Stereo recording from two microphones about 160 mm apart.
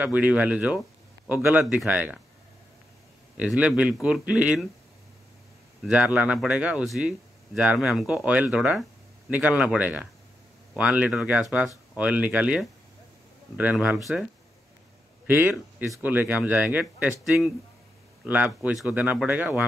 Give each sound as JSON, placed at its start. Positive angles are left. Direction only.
{"t": 0.0, "sound": "speech", "side_deg": -10}
{"t": 3.3, "sound": "speech", "side_deg": -5}
{"t": 5.9, "sound": "speech", "side_deg": -10}
{"t": 15.2, "sound": "a man's voice", "side_deg": -10}